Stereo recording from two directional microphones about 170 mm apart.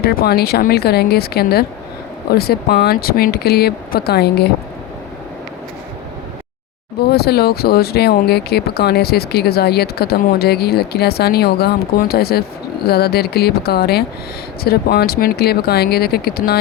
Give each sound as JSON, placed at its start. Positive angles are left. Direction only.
{"t": 0.0, "sound": "speech", "side_deg": 60}
{"t": 7.0, "sound": "speech", "side_deg": 70}